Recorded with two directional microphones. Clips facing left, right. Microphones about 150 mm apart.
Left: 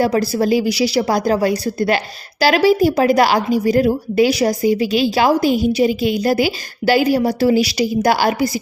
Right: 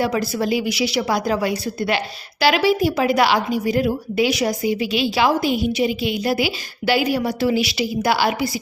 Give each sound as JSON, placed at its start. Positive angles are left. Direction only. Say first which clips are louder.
{"t": 0.0, "sound": "a woman's voice", "louder": "left 5 dB", "side_deg": 35}